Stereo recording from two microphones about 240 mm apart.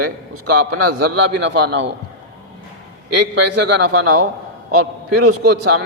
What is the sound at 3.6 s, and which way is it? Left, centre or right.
A man's voice, right.